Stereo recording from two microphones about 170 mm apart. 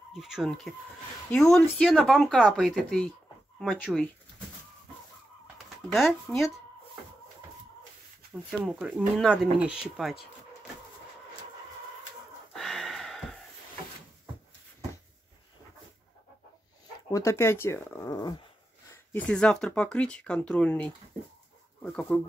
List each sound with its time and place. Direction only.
0.1 s speech: centre (ahead or behind)
5.9 s speech: centre (ahead or behind)
8.5 s speech: 5° right (ahead or behind)
12.5 s a sound: centre (ahead or behind)
17.1 s speech: 15° left (ahead or behind)
18.9 s speech: 10° left (ahead or behind)